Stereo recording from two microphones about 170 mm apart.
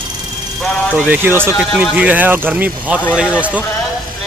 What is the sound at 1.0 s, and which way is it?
Speech, 10° right (ahead or behind).